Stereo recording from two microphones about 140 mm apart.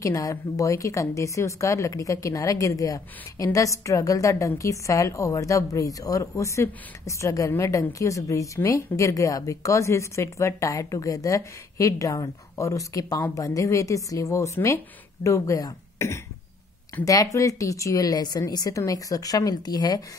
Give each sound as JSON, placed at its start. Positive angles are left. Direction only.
{"t": 0.0, "sound": "a woman's voice", "side_deg": 25}